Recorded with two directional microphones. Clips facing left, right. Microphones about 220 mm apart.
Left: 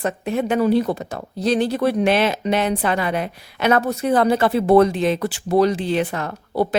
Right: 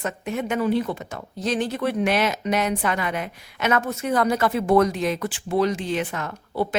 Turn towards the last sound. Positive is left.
turn(degrees=35)  # may be behind; listen again after turning